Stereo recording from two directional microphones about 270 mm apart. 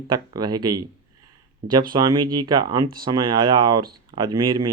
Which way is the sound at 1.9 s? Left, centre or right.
Centre.